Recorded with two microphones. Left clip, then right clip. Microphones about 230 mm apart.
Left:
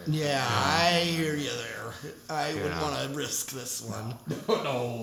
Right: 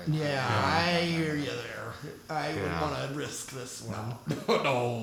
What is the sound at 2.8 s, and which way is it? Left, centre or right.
Speech, left.